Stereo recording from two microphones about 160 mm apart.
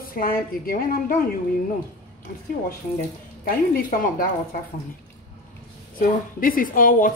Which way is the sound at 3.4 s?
60° left (ahead or behind).